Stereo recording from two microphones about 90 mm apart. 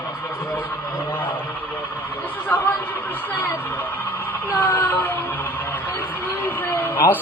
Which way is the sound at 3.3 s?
20° left (ahead or behind).